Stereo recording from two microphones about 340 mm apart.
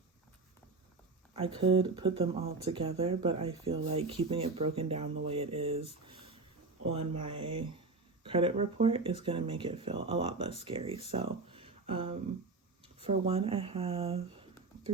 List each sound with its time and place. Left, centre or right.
1.4 s speech: centre
7.3 s speech: centre